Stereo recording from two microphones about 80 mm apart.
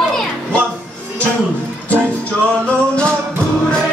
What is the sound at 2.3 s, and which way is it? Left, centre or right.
Music, centre.